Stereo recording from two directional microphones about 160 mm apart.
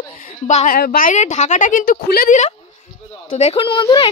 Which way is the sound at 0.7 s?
65° left (ahead or behind).